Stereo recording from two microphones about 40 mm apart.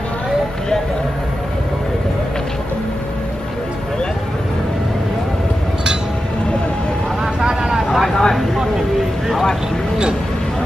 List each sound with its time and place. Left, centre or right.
7.3 s vehicle: centre
8.0 s a sound: centre
9.3 s vehicle: centre